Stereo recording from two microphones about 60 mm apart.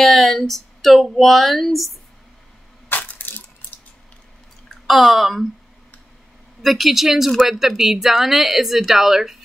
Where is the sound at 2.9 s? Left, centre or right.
Left.